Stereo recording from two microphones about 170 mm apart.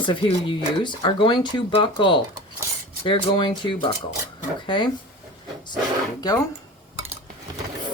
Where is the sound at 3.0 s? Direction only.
30° left (ahead or behind).